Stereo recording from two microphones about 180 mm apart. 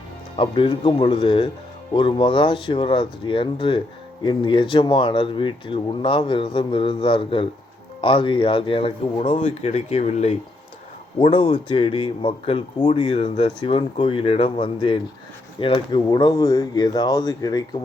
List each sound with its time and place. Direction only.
0.3 s speech: 30° left (ahead or behind)